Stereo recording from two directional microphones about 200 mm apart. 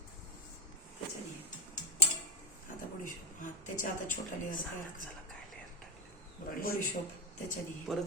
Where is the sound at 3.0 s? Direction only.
40° left (ahead or behind).